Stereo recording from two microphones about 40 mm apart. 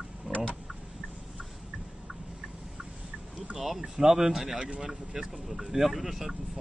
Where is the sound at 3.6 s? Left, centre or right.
Centre.